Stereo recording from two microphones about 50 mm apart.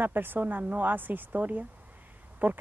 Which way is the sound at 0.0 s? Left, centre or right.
Right.